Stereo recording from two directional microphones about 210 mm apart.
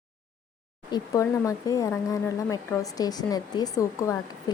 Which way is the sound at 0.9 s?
15° left (ahead or behind).